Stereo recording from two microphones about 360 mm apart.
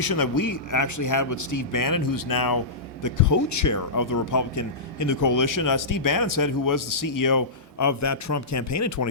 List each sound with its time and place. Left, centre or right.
0.0 s speech: left
3.0 s speech: left